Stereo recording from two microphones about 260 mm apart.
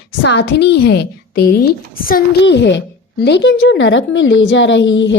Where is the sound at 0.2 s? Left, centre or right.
Left.